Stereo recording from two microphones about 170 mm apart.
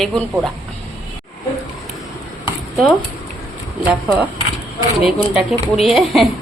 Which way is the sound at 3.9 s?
5° right (ahead or behind).